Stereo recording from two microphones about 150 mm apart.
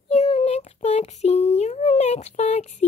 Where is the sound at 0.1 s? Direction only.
40° left (ahead or behind).